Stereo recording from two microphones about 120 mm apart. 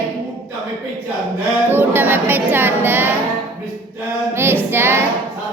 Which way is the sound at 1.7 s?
15° right (ahead or behind).